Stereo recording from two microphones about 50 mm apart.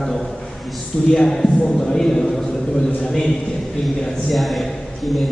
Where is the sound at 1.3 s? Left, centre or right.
Centre.